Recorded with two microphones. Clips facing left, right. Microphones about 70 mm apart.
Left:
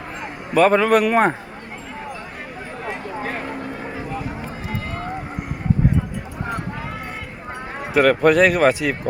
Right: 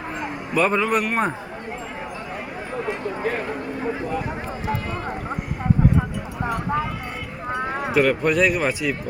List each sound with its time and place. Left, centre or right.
0.5 s a man's voice: left
7.9 s a man's voice: left